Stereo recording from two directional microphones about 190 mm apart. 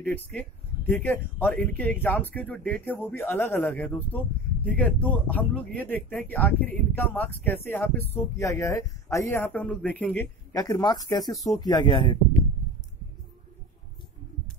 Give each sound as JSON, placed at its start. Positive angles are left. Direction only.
{"t": 0.0, "sound": "speech", "side_deg": 5}
{"t": 10.5, "sound": "speech", "side_deg": 20}